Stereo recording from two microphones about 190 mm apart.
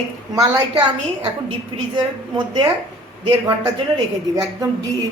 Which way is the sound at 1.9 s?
20° right (ahead or behind).